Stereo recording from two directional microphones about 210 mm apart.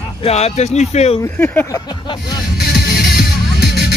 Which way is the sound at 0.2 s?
30° left (ahead or behind).